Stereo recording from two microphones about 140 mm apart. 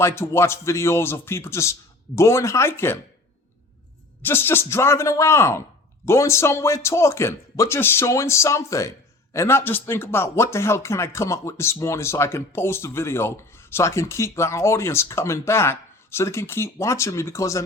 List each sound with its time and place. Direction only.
0.0 s speech: 20° left (ahead or behind)
4.2 s speech: 15° left (ahead or behind)